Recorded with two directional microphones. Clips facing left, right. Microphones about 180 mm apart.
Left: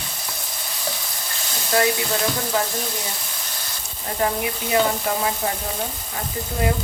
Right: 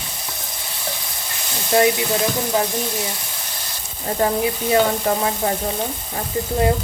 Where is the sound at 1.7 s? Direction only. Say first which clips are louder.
Right 4 dB; 25° right (ahead or behind).